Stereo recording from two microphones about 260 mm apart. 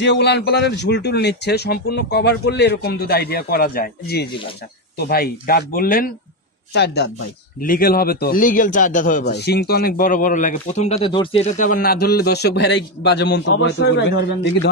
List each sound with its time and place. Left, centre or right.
0.0 s a man's voice: left